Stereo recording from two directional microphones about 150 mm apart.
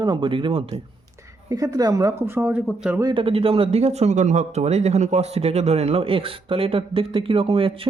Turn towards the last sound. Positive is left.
turn(degrees=-35)  # may be behind; listen again after turning